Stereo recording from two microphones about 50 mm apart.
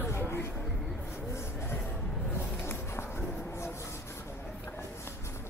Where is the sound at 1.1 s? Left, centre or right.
Left.